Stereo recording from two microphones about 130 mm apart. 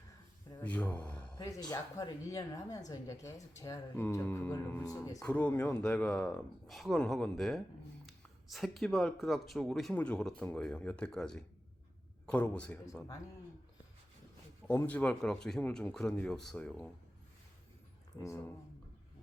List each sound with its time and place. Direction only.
0.6 s speech: 10° left (ahead or behind)
1.4 s a woman's voice: 25° left (ahead or behind)
4.0 s speech: 15° left (ahead or behind)
4.8 s a woman's voice: 25° left (ahead or behind)
5.2 s a man's voice: 10° left (ahead or behind)
14.7 s speech: 10° left (ahead or behind)
18.2 s a woman's voice: 20° left (ahead or behind)